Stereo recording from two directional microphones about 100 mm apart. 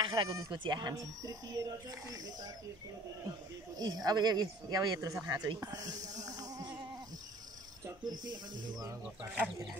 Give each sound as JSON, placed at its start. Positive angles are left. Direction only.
{"t": 0.0, "sound": "bleat", "side_deg": -55}
{"t": 0.5, "sound": "speech", "side_deg": -45}
{"t": 3.7, "sound": "speech", "side_deg": -40}
{"t": 8.0, "sound": "speech", "side_deg": -45}
{"t": 9.0, "sound": "speech", "side_deg": -10}